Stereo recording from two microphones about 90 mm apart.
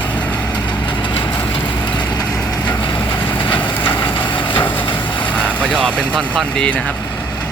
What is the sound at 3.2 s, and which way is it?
Vehicle, 70° left (ahead or behind).